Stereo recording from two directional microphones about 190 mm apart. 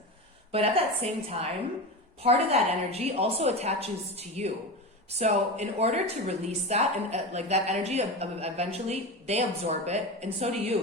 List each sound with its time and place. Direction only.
0.5 s speech: 30° right (ahead or behind)